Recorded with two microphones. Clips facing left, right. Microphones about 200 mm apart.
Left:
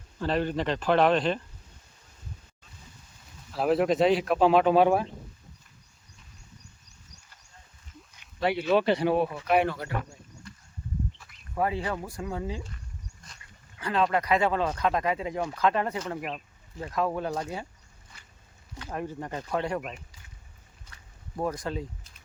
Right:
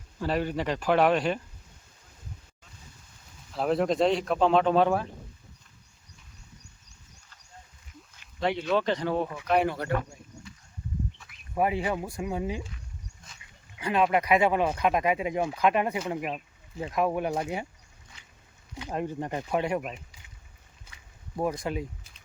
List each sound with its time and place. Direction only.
0.2 s speech: 10° right (ahead or behind)
3.5 s speech: 5° left (ahead or behind)
8.2 s speech: 5° left (ahead or behind)
11.2 s a sound: centre (ahead or behind)
11.5 s speech: 15° right (ahead or behind)
13.7 s speech: 15° right (ahead or behind)
18.8 s speech: 20° right (ahead or behind)
21.3 s speech: 10° right (ahead or behind)